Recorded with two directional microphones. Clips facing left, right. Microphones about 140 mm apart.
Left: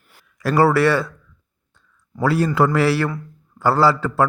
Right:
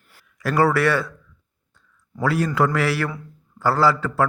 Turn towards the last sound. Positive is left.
turn(degrees=30)  # may be behind; listen again after turning